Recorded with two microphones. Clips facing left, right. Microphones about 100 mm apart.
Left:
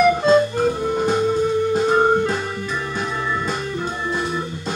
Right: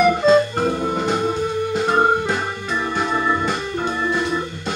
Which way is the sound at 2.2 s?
65° right (ahead or behind).